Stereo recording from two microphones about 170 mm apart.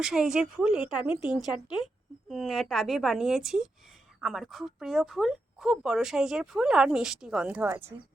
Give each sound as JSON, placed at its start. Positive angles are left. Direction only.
{"t": 0.0, "sound": "speech", "side_deg": -5}
{"t": 1.8, "sound": "speech", "side_deg": 20}
{"t": 2.3, "sound": "speech", "side_deg": 0}